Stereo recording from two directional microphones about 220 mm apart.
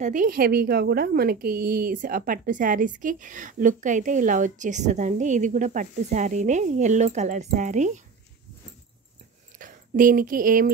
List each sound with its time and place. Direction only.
0.0 s a woman's voice: 35° right (ahead or behind)
9.6 s speech: 40° right (ahead or behind)